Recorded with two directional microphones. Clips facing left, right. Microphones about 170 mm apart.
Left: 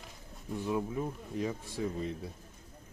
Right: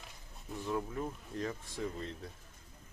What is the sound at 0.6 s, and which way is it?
Speech, 15° left (ahead or behind).